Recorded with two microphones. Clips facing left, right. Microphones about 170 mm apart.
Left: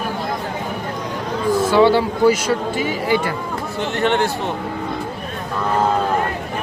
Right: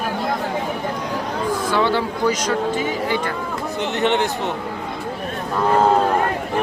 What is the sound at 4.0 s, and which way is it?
Speech, 20° right (ahead or behind).